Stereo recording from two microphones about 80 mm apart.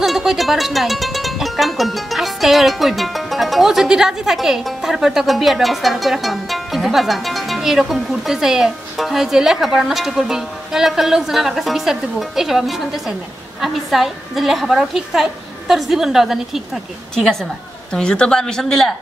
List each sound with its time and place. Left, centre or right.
0.0 s speech: centre